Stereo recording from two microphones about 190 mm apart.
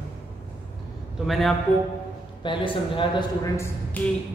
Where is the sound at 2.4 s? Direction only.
25° left (ahead or behind).